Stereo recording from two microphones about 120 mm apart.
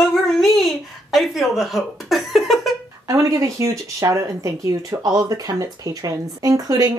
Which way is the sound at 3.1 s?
25° right (ahead or behind).